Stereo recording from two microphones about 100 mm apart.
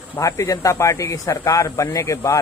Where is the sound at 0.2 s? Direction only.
30° left (ahead or behind).